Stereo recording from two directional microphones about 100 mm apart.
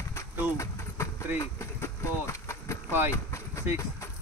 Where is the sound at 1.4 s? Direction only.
30° left (ahead or behind).